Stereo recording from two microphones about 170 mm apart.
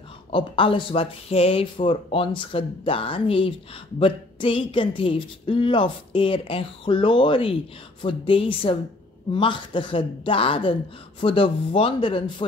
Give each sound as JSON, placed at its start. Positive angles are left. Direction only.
{"t": 0.3, "sound": "a woman's voice", "side_deg": 30}